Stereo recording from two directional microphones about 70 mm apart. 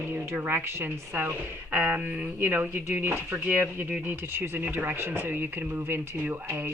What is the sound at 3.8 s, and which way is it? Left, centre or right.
Speech, right.